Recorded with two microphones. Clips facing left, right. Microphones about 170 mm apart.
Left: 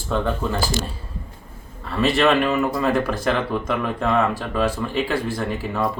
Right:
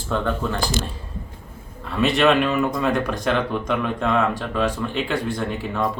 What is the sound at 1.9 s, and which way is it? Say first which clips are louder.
Speech: even; centre (ahead or behind).